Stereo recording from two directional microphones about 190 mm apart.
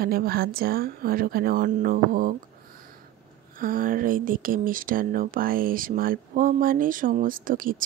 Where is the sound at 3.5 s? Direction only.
45° right (ahead or behind).